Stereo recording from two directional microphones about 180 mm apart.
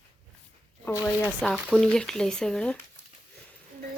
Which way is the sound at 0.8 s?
15° left (ahead or behind).